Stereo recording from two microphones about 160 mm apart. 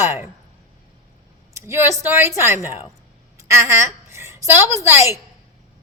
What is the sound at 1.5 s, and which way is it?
A woman's voice, 15° right (ahead or behind).